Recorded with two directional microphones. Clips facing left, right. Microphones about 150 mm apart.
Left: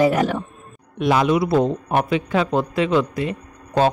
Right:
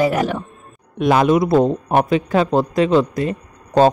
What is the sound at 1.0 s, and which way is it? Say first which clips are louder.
A man's voice: right 3 dB; 50° right (ahead or behind).